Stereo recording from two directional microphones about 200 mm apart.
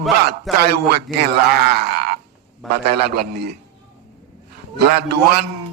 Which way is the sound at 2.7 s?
50° right (ahead or behind).